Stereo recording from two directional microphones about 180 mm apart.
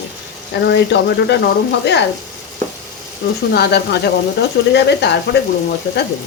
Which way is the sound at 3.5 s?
65° left (ahead or behind).